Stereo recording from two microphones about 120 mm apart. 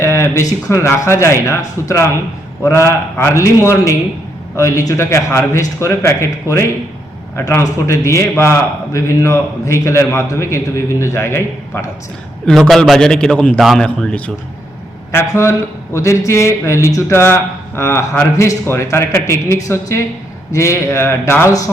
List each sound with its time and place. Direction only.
0.0 s a man's voice: 25° left (ahead or behind)
12.5 s a man's voice: centre (ahead or behind)
15.1 s a man's voice: 25° left (ahead or behind)